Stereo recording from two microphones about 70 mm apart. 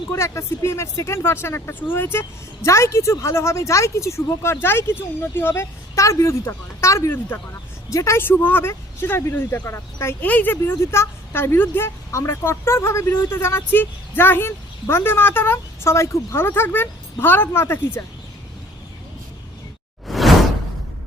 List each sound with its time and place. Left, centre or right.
0.1 s speech: left
5.9 s speech: left
8.3 s speech: left
10.2 s speech: left
20.1 s whoosh: centre